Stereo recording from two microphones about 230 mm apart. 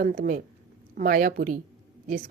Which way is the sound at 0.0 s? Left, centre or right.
Right.